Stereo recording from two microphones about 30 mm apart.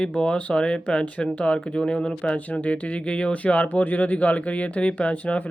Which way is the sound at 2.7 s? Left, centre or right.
Left.